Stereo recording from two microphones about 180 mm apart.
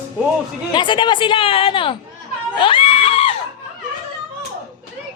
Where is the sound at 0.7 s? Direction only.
25° left (ahead or behind).